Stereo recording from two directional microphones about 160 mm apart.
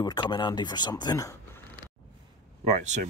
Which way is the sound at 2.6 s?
45° right (ahead or behind).